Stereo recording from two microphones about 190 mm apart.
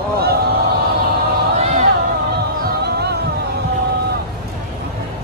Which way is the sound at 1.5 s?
35° right (ahead or behind).